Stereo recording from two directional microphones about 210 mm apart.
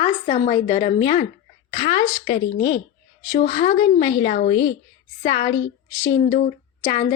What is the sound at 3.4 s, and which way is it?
Speech, 40° left (ahead or behind).